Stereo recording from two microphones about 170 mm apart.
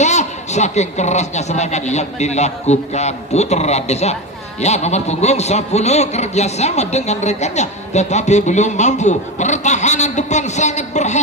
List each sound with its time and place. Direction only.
0.0 s a man's voice: 45° left (ahead or behind)